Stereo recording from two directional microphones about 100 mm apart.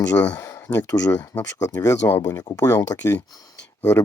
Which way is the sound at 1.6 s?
40° left (ahead or behind).